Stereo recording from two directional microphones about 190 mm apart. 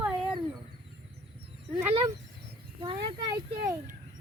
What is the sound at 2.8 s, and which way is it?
Speech, 25° right (ahead or behind).